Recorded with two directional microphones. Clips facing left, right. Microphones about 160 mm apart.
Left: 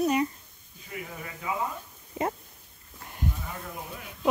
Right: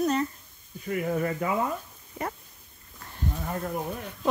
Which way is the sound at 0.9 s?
55° right (ahead or behind).